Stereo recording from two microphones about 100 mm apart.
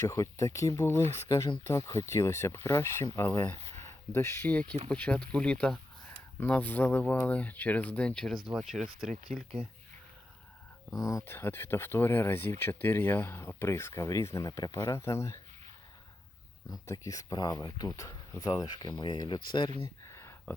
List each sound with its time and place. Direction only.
0.0 s speech: 30° left (ahead or behind)
3.8 s a sound: 25° left (ahead or behind)
4.4 s speech: 15° left (ahead or behind); by 9.4 s centre (ahead or behind)
11.0 s speech: 30° left (ahead or behind)
16.8 s speech: 35° left (ahead or behind); by 19.7 s 50° left (ahead or behind)
20.1 s a sound: 30° left (ahead or behind)